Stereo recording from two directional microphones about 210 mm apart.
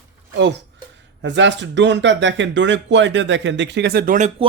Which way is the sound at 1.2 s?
60° right (ahead or behind).